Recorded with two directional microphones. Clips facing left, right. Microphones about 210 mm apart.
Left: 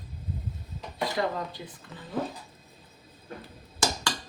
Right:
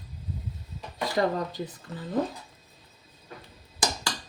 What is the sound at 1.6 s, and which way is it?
Speech, 40° right (ahead or behind).